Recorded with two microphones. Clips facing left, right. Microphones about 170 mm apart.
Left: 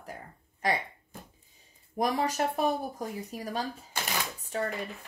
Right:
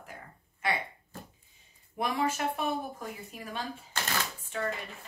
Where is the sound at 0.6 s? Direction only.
40° left (ahead or behind).